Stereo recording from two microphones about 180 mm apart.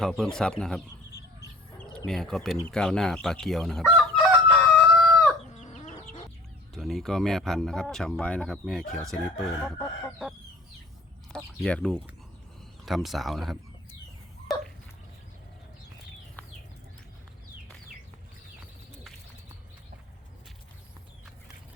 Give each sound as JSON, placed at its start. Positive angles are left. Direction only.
{"t": 0.0, "sound": "speech", "side_deg": 5}
{"t": 2.0, "sound": "speech", "side_deg": 0}
{"t": 2.6, "sound": "chicken", "side_deg": 5}
{"t": 5.5, "sound": "chicken", "side_deg": 40}
{"t": 6.7, "sound": "speech", "side_deg": 0}
{"t": 11.6, "sound": "speech", "side_deg": 5}
{"t": 14.5, "sound": "a sound", "side_deg": 0}